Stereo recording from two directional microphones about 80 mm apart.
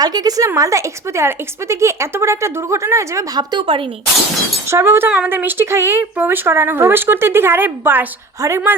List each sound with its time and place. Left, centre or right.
0.0 s a woman's voice: right
0.4 s a woman's voice: right
3.3 s a woman's voice: right
4.7 s a woman's voice: right
5.0 s speech: centre
8.4 s a woman's voice: right